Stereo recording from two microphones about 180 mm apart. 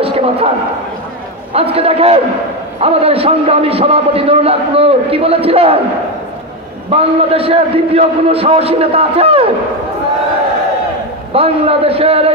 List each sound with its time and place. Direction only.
0.0 s a sound: 35° right (ahead or behind)
1.5 s a man's voice: 35° right (ahead or behind)
6.9 s a man's voice: 35° right (ahead or behind)
11.3 s a man's voice: 35° right (ahead or behind)